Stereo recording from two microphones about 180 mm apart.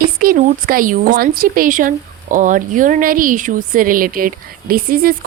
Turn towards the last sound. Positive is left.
turn(degrees=-55)  # may be behind; listen again after turning